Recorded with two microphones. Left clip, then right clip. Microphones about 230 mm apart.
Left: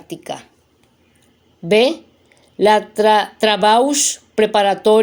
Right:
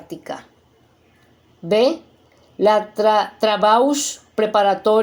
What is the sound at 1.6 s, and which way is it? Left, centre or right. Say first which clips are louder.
Speech: left 2 dB; left.